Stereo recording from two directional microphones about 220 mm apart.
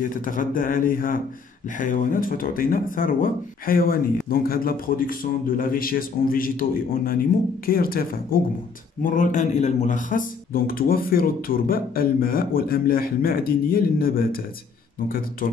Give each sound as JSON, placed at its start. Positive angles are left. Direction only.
{"t": 0.0, "sound": "speech", "side_deg": 40}